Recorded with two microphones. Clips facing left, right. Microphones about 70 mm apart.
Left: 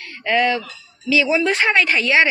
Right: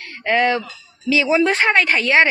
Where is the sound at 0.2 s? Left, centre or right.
Right.